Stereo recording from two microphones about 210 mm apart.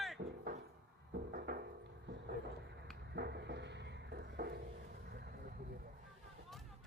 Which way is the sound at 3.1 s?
50° right (ahead or behind).